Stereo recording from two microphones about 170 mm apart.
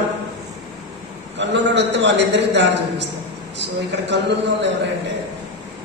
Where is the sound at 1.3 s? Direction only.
90° right.